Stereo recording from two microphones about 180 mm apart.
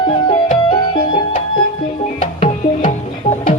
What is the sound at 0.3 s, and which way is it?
Music, 25° left (ahead or behind).